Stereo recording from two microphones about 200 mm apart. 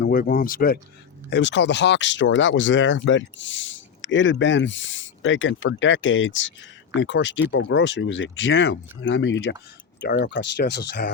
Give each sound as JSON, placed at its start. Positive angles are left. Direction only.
{"t": 0.0, "sound": "speech", "side_deg": 45}
{"t": 1.3, "sound": "speech", "side_deg": 60}